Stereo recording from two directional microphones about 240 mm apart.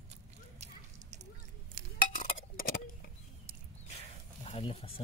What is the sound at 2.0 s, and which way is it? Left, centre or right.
Chink, left.